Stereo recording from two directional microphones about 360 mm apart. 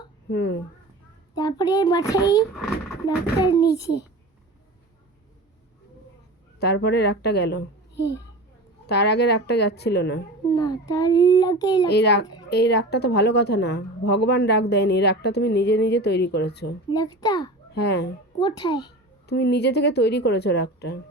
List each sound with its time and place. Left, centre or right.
0.3 s a woman's voice: left
1.4 s a child's voice: centre
3.4 s a child's voice: centre
6.6 s a woman's voice: left
10.5 s a child's voice: centre
11.9 s a woman's voice: left
16.9 s a child's voice: centre
17.7 s speech: left
18.6 s a child's voice: centre
19.3 s a woman's voice: left